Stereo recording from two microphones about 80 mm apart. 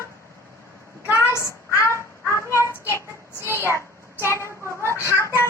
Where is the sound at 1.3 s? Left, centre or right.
Left.